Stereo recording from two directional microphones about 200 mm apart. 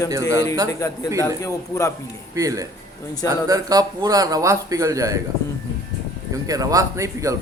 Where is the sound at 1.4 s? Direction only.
15° left (ahead or behind).